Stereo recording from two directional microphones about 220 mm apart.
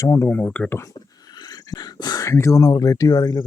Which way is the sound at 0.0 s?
15° left (ahead or behind).